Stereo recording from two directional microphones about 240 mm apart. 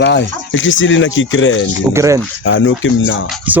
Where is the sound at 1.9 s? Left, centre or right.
Centre.